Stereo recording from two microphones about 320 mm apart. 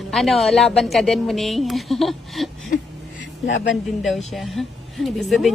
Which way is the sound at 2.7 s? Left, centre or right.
Left.